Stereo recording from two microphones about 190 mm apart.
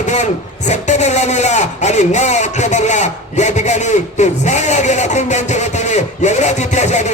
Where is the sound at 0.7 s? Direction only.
35° left (ahead or behind).